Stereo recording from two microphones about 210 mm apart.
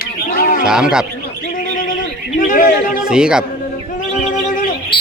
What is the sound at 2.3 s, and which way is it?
Speech, 40° left (ahead or behind).